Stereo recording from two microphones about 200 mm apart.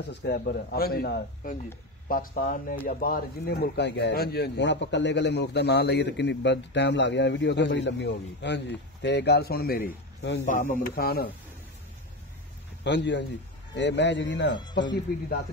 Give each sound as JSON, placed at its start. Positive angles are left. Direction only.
{"t": 0.1, "sound": "speech", "side_deg": 55}
{"t": 10.4, "sound": "speech", "side_deg": 40}
{"t": 12.8, "sound": "speech", "side_deg": 60}